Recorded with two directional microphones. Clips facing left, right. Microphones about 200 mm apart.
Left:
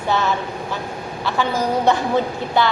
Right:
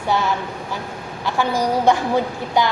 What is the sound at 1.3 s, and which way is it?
A woman's voice, 15° right (ahead or behind).